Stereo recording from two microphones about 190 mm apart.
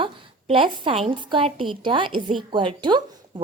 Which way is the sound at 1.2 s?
25° right (ahead or behind).